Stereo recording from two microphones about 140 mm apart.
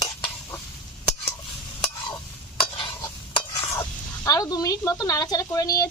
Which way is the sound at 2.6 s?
35° left (ahead or behind).